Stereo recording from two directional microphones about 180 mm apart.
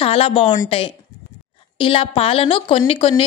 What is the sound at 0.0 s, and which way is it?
A woman's voice, 30° left (ahead or behind).